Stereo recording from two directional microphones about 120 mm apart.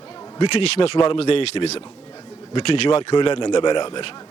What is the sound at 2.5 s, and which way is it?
A man's voice, 45° left (ahead or behind).